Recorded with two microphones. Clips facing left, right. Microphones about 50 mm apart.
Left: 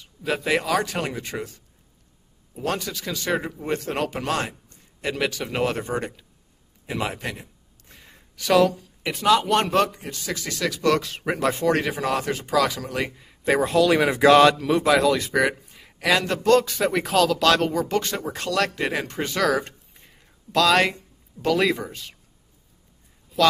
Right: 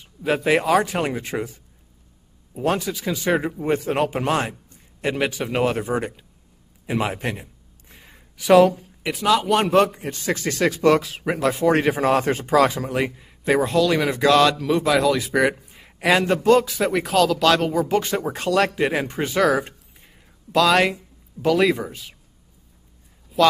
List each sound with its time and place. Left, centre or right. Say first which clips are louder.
0.0 s speech: right 4 dB; centre
7.9 s a sound: right 1 dB; centre
9.0 s speech: even; centre
9.8 s speech: right 6 dB; right
10.8 s speech: right 3 dB; centre
11.7 s speech: right 4 dB; right
12.0 s speech: right 5 dB; right
12.9 s speech: right 4 dB; centre
14.6 s a man's voice: even; centre
16.4 s speech: even; centre
23.4 s speech: right 2 dB; centre